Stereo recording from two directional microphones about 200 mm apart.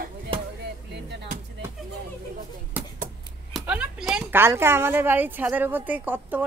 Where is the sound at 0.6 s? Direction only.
55° right (ahead or behind).